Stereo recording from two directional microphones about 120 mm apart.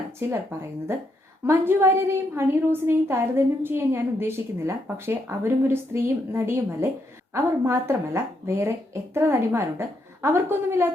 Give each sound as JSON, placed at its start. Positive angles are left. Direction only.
{"t": 0.2, "sound": "a woman's voice", "side_deg": -20}